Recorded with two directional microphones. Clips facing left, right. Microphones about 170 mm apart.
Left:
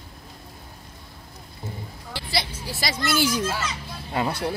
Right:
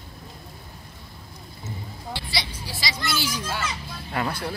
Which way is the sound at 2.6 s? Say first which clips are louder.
Left 4 dB; 50° left (ahead or behind).